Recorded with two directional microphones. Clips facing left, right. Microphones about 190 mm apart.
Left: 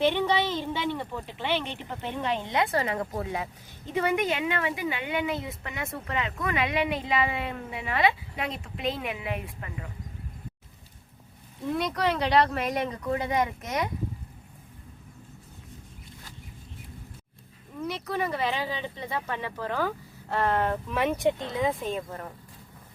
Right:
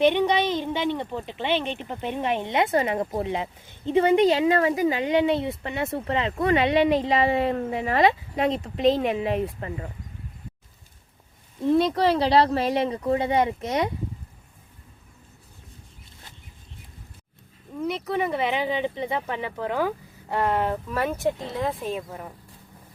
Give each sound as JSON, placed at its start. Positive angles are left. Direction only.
{"t": 0.0, "sound": "speech", "side_deg": -15}
{"t": 11.7, "sound": "speech", "side_deg": -30}
{"t": 17.8, "sound": "speech", "side_deg": -20}